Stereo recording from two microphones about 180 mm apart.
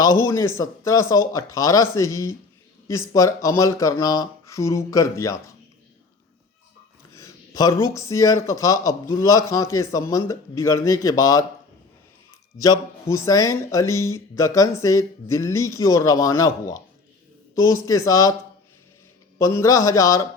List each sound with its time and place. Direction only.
0.0 s speech: 15° left (ahead or behind)
7.1 s speech: 15° left (ahead or behind)
12.5 s speech: 20° left (ahead or behind)
19.4 s speech: 15° left (ahead or behind)